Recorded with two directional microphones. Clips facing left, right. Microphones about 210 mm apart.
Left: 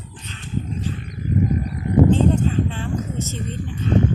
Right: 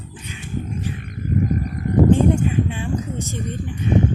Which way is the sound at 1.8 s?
50° right (ahead or behind).